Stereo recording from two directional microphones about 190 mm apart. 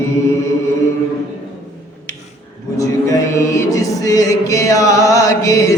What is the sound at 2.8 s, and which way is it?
Music, 15° left (ahead or behind).